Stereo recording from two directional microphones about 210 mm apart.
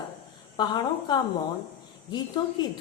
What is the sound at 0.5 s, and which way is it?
A woman's voice, 20° left (ahead or behind).